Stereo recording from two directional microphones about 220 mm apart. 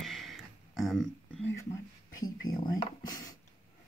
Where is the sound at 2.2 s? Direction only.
20° left (ahead or behind).